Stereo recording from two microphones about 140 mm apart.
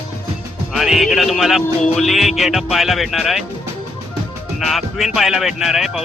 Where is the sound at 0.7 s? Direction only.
Centre (ahead or behind).